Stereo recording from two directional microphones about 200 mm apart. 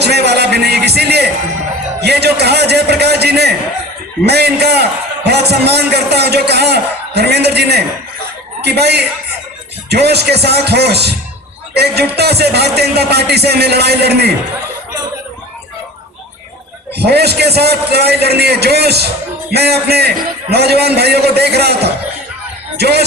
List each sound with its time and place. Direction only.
0.0 s music: 55° right (ahead or behind)
2.0 s speech: 55° right (ahead or behind)
16.9 s a man's voice: 55° right (ahead or behind)
22.8 s a man's voice: 55° right (ahead or behind)